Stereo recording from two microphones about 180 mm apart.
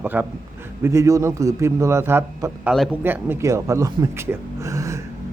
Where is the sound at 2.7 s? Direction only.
Centre (ahead or behind).